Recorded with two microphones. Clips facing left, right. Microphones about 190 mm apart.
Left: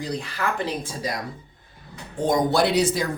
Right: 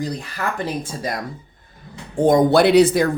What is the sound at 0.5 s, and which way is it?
Speech, 55° right (ahead or behind).